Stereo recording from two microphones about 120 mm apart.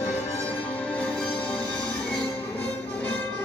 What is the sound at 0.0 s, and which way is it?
Music, 15° left (ahead or behind).